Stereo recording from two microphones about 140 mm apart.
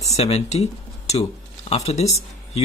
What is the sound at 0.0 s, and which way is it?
Speech, 50° left (ahead or behind).